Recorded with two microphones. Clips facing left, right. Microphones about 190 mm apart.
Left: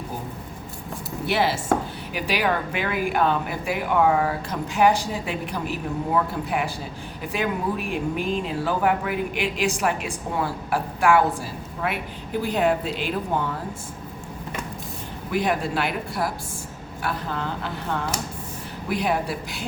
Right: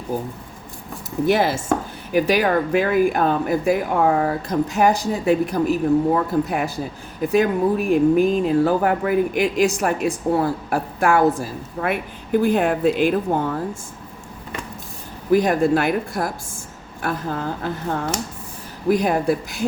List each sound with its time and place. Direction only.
1.3 s speech: 45° right (ahead or behind)
15.3 s speech: 40° right (ahead or behind)